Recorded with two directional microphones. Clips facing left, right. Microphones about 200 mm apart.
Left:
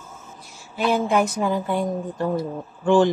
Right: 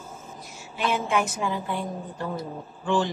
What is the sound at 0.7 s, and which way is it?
Speech, 35° left (ahead or behind).